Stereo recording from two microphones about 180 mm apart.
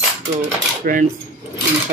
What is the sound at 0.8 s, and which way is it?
Speech, 55° right (ahead or behind).